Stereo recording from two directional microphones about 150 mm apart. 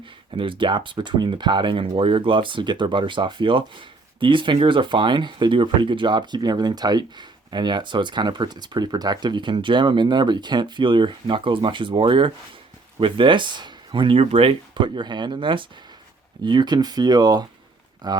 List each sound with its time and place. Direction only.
0.3 s speech: 35° right (ahead or behind)